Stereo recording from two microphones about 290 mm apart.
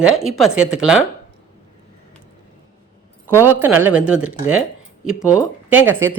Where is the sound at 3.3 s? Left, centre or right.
Centre.